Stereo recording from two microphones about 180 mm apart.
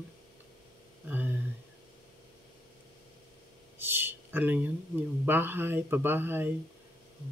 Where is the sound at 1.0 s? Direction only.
10° right (ahead or behind).